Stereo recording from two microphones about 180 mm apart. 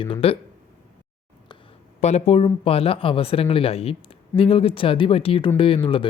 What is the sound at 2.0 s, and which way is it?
Speech, 40° left (ahead or behind).